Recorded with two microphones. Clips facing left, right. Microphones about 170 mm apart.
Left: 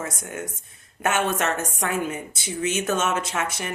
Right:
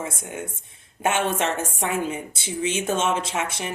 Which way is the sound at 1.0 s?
30° right (ahead or behind).